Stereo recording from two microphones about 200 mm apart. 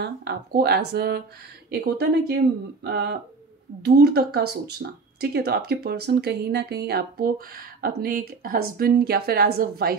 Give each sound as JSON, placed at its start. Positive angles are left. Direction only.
{"t": 0.0, "sound": "speech", "side_deg": -55}